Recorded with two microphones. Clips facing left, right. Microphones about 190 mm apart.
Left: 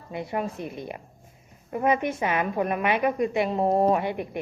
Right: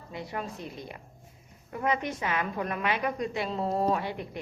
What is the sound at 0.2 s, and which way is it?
Speech, 20° left (ahead or behind).